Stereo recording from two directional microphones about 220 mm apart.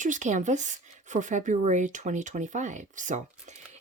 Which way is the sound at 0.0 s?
35° right (ahead or behind).